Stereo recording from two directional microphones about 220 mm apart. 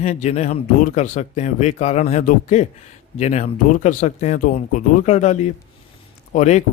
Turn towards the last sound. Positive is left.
turn(degrees=35)  # may be behind; listen again after turning